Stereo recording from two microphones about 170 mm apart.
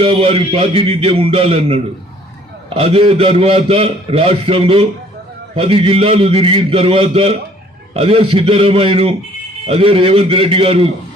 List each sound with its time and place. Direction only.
0.0 s a man's voice: 35° right (ahead or behind)